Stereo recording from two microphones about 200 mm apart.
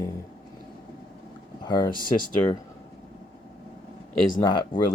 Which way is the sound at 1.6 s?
20° left (ahead or behind).